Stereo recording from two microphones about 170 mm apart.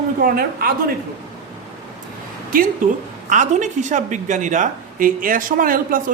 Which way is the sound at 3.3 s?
45° right (ahead or behind).